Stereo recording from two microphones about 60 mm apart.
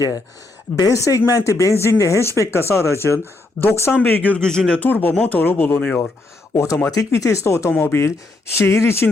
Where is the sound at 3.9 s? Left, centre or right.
Left.